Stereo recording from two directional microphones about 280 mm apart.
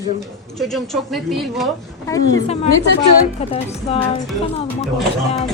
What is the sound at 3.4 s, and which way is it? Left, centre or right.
Speech, left.